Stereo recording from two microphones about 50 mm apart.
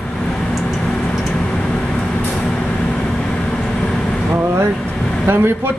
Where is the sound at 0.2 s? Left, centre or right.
Centre.